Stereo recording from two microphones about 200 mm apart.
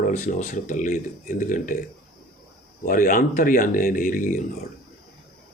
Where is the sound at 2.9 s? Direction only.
45° left (ahead or behind).